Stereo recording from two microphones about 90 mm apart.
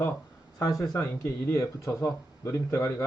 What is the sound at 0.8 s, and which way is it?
Speech, 35° left (ahead or behind).